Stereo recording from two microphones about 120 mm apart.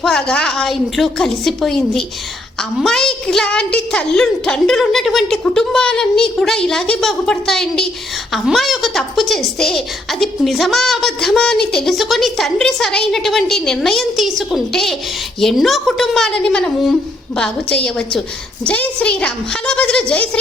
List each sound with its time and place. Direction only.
0.0 s a woman's voice: 5° left (ahead or behind)